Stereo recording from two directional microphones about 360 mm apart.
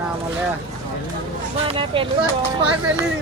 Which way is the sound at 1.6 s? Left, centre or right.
Centre.